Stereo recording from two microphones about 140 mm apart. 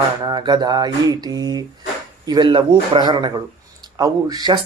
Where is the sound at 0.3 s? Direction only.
30° right (ahead or behind).